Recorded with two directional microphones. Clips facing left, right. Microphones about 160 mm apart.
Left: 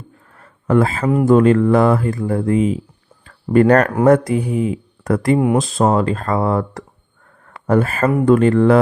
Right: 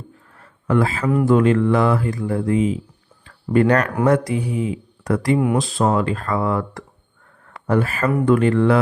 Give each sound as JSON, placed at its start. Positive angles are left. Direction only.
{"t": 0.3, "sound": "a sound", "side_deg": 45}
{"t": 1.0, "sound": "speech", "side_deg": 20}
{"t": 1.3, "sound": "speech", "side_deg": 40}